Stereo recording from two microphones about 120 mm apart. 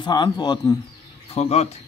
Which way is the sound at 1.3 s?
60° left (ahead or behind).